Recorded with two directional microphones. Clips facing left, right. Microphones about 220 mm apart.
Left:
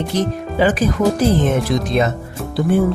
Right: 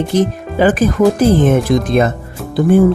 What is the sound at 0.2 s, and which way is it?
Speech, 50° right (ahead or behind).